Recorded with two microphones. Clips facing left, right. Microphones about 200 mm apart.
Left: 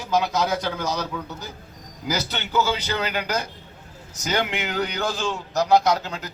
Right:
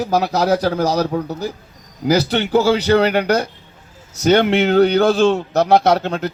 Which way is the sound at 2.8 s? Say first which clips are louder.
Right 12 dB; 65° right (ahead or behind).